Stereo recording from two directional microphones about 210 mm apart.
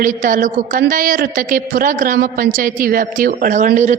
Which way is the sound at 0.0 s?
40° right (ahead or behind).